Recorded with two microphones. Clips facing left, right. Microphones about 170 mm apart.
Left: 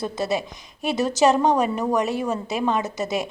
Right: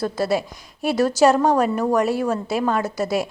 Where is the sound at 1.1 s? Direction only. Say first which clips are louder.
Right 1 dB; 20° left (ahead or behind).